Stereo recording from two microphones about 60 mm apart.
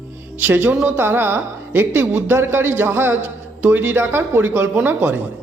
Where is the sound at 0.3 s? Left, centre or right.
Right.